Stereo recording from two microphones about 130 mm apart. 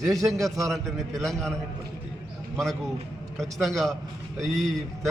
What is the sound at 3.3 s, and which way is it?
A man's voice, centre (ahead or behind).